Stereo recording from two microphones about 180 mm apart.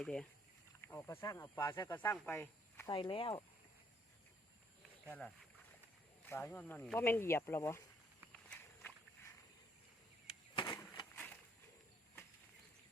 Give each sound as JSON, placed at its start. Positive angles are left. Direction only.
{"t": 0.0, "sound": "speech", "side_deg": 5}
{"t": 2.9, "sound": "speech", "side_deg": 30}
{"t": 6.2, "sound": "speech", "side_deg": 10}
{"t": 8.4, "sound": "walk", "side_deg": 10}
{"t": 10.5, "sound": "a sound", "side_deg": 25}